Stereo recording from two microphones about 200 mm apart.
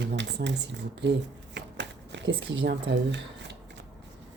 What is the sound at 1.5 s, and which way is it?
Shuffling cards, 60° right (ahead or behind).